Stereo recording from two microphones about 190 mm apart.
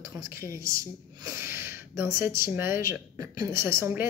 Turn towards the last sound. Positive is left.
turn(degrees=-15)  # may be behind; listen again after turning